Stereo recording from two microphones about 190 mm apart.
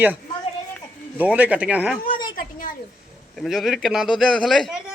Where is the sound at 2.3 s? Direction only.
45° left (ahead or behind).